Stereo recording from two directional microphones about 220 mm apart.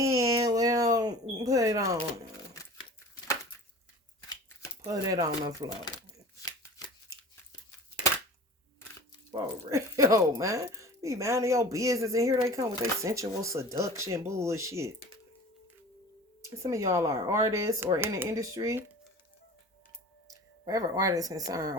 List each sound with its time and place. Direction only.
0.0 s a sound: 15° right (ahead or behind)
4.3 s scissors: 15° left (ahead or behind)
4.9 s speech: 15° right (ahead or behind)
9.3 s speech: 15° right (ahead or behind)
16.6 s speech: 15° right (ahead or behind)
20.3 s speech: 15° right (ahead or behind)